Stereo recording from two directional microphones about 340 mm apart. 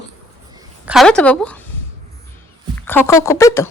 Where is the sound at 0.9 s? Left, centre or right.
Centre.